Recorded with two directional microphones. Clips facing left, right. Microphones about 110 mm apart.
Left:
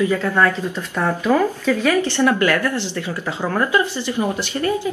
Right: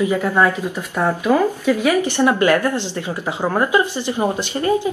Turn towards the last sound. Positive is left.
turn(degrees=-15)  # may be behind; listen again after turning